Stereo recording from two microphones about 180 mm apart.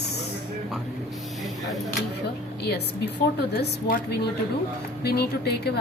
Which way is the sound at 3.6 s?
65° left (ahead or behind).